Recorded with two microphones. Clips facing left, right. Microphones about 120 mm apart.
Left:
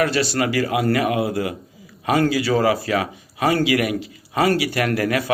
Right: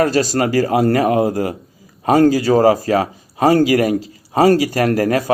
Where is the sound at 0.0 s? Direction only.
40° right (ahead or behind).